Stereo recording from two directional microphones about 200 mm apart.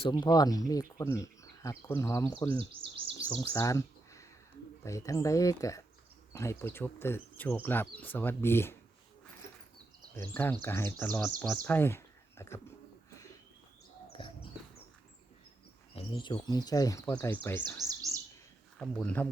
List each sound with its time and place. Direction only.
0.0 s speech: 20° left (ahead or behind)
2.5 s speech: 25° right (ahead or behind)
3.2 s speech: 15° left (ahead or behind)
10.2 s speech: 10° left (ahead or behind)
14.1 s a sound: 25° left (ahead or behind)
16.0 s speech: 25° left (ahead or behind); by 17.7 s 10° left (ahead or behind)
18.1 s bird: 15° left (ahead or behind)
18.8 s speech: 5° left (ahead or behind)